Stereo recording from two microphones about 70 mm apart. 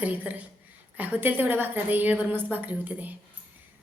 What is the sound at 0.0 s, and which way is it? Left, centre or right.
A woman's voice, right.